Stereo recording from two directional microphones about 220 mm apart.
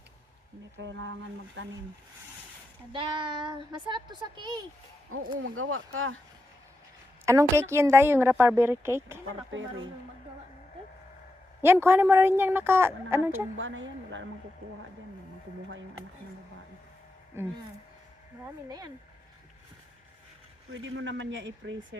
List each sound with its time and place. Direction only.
0.8 s speech: 55° right (ahead or behind)
2.9 s a child's voice: 20° right (ahead or behind)
5.4 s speech: 65° right (ahead or behind)
7.3 s a woman's voice: 15° right (ahead or behind)
9.5 s speech: 60° right (ahead or behind)
11.6 s a woman's voice: 10° right (ahead or behind)
13.6 s speech: 60° right (ahead or behind)
17.4 s a woman's voice: 10° right (ahead or behind)
20.8 s speech: 60° right (ahead or behind)